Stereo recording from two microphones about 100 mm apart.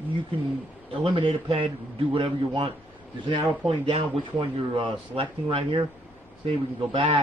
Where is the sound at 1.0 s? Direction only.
65° right (ahead or behind).